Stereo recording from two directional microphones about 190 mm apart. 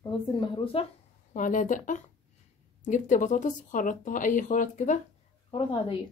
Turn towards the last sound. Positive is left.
turn(degrees=25)  # may be behind; listen again after turning